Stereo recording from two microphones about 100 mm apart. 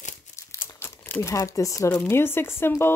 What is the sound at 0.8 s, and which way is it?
Crumpling, 20° left (ahead or behind).